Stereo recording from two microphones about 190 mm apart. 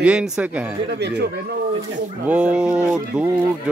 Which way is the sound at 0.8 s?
60° right (ahead or behind).